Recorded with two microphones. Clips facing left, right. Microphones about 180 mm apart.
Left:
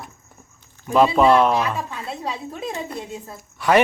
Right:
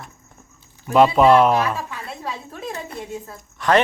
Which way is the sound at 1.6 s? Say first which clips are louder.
Even; 25° left (ahead or behind).